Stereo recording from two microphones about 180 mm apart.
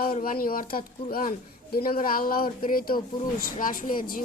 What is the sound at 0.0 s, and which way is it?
Speech, 50° left (ahead or behind).